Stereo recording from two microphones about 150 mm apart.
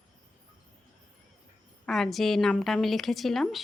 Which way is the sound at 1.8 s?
Centre (ahead or behind).